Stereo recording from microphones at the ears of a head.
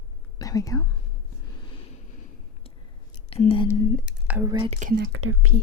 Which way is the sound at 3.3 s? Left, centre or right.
Left.